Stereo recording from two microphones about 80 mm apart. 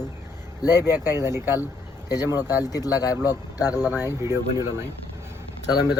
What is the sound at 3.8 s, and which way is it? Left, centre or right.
Speech, right.